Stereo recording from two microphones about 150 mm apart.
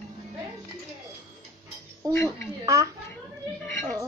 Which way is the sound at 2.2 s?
20° right (ahead or behind).